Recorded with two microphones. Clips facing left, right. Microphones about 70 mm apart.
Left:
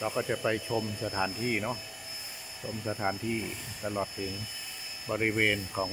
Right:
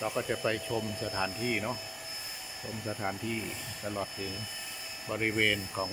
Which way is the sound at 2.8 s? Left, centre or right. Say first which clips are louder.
Left 3 dB; centre.